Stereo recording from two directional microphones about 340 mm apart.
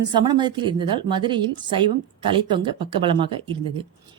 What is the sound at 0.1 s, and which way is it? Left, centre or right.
A woman's voice, centre.